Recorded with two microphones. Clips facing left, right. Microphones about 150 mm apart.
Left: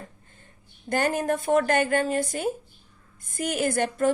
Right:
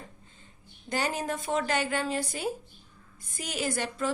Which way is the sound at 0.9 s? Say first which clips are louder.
Left 6 dB; 50° left (ahead or behind).